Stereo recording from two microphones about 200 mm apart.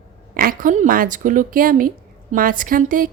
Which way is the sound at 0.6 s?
40° right (ahead or behind).